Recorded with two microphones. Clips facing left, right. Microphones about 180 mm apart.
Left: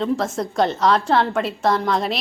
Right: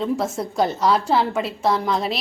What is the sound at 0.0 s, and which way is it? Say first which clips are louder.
A woman's voice: left 1 dB; 5° right (ahead or behind).